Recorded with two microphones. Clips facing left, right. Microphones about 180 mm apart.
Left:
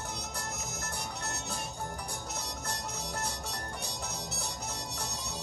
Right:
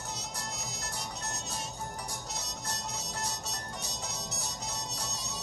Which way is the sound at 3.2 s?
60° left (ahead or behind).